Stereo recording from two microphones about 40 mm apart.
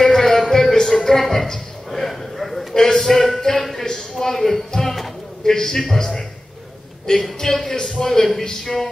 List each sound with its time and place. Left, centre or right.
0.0 s music: centre
2.7 s a sound: centre
7.1 s speech: centre